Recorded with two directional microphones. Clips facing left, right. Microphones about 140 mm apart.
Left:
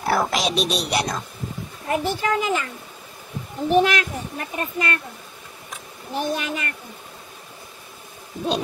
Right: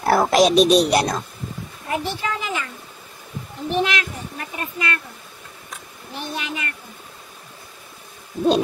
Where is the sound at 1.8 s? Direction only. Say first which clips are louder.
Left 3 dB; 45° left (ahead or behind).